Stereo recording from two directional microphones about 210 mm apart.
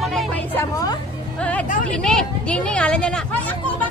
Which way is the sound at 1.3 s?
5° left (ahead or behind).